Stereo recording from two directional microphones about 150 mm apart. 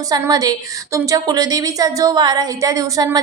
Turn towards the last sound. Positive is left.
turn(degrees=-25)  # may be behind; listen again after turning